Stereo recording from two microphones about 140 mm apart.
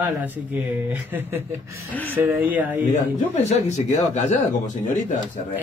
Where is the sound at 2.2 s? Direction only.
15° right (ahead or behind).